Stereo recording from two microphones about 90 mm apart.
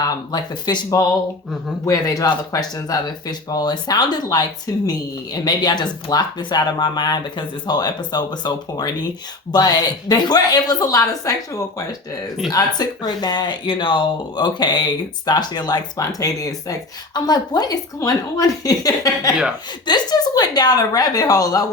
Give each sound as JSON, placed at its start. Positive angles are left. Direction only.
{"t": 0.0, "sound": "speech", "side_deg": 50}
{"t": 1.8, "sound": "speech", "side_deg": 40}